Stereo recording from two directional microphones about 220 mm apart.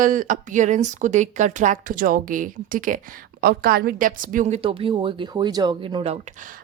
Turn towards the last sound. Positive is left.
turn(degrees=-35)  # may be behind; listen again after turning